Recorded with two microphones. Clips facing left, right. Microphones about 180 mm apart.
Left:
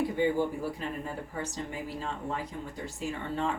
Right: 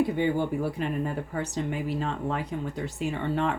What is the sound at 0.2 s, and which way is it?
Speech, 65° right (ahead or behind).